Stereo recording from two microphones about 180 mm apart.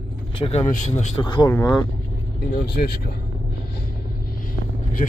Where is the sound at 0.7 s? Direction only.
40° left (ahead or behind).